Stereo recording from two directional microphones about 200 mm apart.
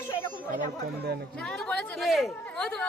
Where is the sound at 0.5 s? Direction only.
45° right (ahead or behind).